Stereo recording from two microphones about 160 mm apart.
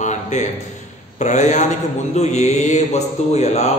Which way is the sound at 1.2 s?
50° left (ahead or behind).